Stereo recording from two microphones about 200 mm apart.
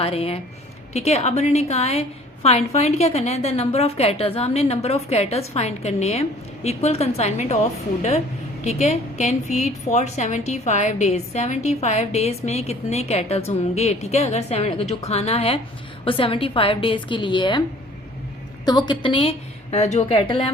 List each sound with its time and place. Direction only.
0.0 s a woman's voice: 30° left (ahead or behind)
8.6 s a woman's voice: 35° left (ahead or behind)
18.6 s a woman's voice: 20° left (ahead or behind)